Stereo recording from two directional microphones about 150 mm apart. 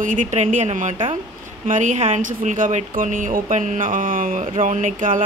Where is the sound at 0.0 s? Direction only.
60° right (ahead or behind).